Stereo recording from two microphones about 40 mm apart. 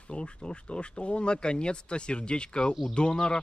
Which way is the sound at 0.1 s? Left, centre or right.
Left.